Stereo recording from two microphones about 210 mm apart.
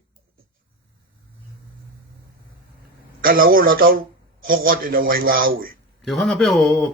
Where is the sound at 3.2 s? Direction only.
45° right (ahead or behind).